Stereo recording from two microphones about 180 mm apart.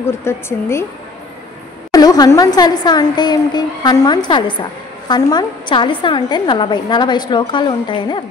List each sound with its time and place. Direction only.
0.0 s speech: 15° left (ahead or behind)
1.9 s a woman's voice: 20° left (ahead or behind)